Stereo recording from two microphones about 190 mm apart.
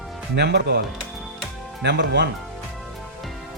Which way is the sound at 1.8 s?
65° right (ahead or behind).